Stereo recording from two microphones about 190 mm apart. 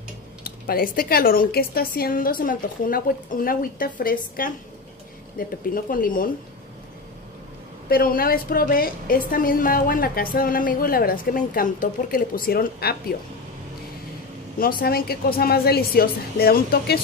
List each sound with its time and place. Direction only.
0.4 s a woman's voice: 50° left (ahead or behind)
7.9 s a woman's voice: 50° left (ahead or behind)
14.6 s a woman's voice: 50° left (ahead or behind)